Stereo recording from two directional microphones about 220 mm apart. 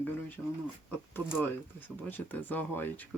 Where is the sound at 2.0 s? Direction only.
10° left (ahead or behind).